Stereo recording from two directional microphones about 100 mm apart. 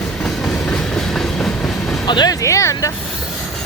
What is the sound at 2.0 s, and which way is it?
Speech, 45° left (ahead or behind).